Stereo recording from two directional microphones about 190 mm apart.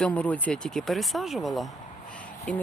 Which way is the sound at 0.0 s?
5° left (ahead or behind).